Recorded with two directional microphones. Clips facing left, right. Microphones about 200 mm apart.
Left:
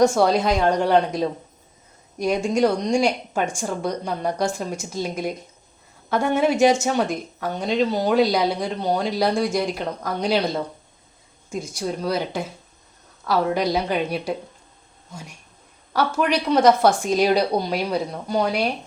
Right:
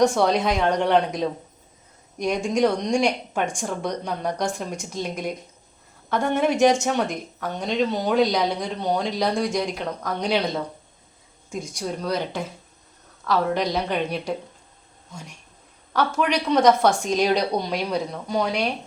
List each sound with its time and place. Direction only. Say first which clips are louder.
0.0 s a woman's voice: left 2 dB; centre (ahead or behind)
15.9 s speech: left 1 dB; 5° left (ahead or behind)